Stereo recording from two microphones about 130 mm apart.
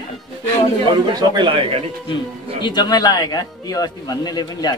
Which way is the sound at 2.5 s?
35° left (ahead or behind).